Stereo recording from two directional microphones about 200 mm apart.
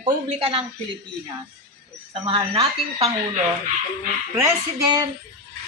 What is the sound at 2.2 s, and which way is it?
Speech, 30° right (ahead or behind).